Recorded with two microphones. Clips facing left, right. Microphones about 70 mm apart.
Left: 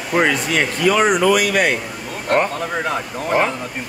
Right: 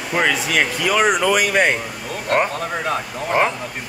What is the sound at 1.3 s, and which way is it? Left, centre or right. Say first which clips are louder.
Speech: left 1 dB; right.